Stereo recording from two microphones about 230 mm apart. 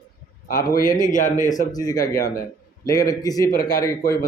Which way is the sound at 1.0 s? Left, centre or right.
Left.